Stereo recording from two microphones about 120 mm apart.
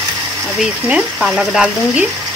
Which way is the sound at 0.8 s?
5° right (ahead or behind).